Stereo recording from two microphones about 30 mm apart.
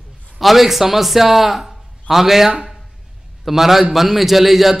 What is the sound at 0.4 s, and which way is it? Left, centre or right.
A man's voice, centre.